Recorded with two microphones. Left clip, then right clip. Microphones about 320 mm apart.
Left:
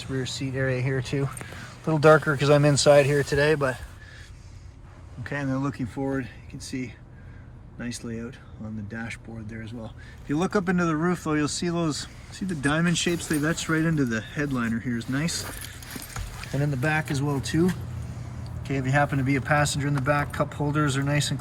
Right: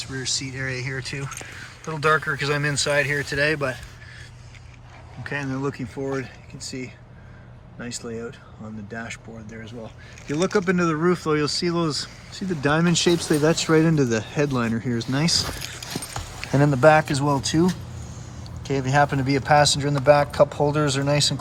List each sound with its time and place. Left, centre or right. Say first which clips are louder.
0.1 s speech: right 1 dB; centre
5.2 s speech: right 2 dB; centre
16.5 s speech: right 10 dB; right
16.8 s speech: right 11 dB; centre
18.6 s speech: right 4 dB; centre